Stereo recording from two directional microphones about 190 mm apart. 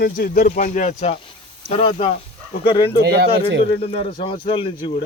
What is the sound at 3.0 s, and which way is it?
Speech, 60° right (ahead or behind).